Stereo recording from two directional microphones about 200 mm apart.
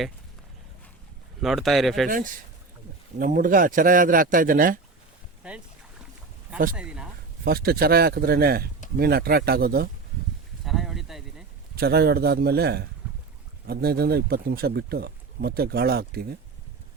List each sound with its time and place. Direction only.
1.4 s speech: centre (ahead or behind)
2.0 s speech: 45° right (ahead or behind)
5.4 s boat: 5° right (ahead or behind)
6.7 s speech: 5° right (ahead or behind)
7.4 s speech: 50° right (ahead or behind)
10.7 s a sound: centre (ahead or behind)
11.8 s speech: 50° right (ahead or behind)